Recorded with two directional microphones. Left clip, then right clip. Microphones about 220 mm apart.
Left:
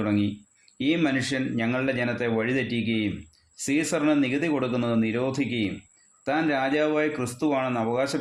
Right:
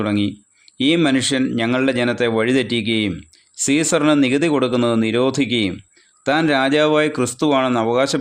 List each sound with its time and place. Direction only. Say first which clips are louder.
0.0 s speech: right 6 dB; 40° right (ahead or behind)